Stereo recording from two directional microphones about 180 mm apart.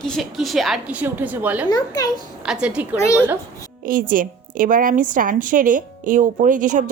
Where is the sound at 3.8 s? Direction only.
50° right (ahead or behind).